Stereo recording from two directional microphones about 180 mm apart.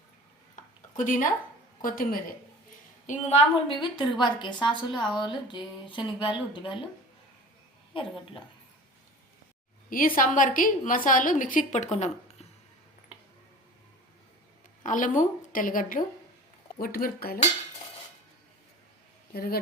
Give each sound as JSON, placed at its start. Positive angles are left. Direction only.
{"t": 0.5, "sound": "a sound", "side_deg": 45}
{"t": 1.8, "sound": "a woman's voice", "side_deg": 50}
{"t": 3.1, "sound": "a woman's voice", "side_deg": 40}
{"t": 4.9, "sound": "a woman's voice", "side_deg": 5}
{"t": 5.5, "sound": "a woman's voice", "side_deg": 25}
{"t": 10.2, "sound": "a woman's voice", "side_deg": 50}
{"t": 14.8, "sound": "a woman's voice", "side_deg": 45}
{"t": 19.3, "sound": "speech", "side_deg": 55}